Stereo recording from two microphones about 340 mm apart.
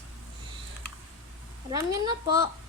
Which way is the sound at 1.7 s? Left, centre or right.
Centre.